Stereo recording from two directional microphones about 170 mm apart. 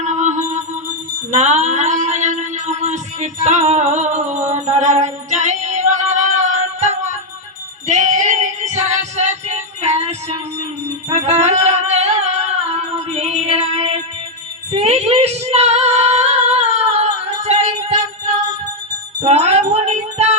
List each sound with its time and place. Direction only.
0.0 s music: 45° right (ahead or behind)
7.9 s female singing: 45° right (ahead or behind)
11.1 s music: 40° right (ahead or behind)
14.7 s female singing: 40° right (ahead or behind)
19.2 s cat: 40° right (ahead or behind)